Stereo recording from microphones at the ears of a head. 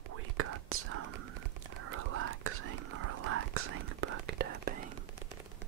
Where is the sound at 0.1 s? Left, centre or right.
Right.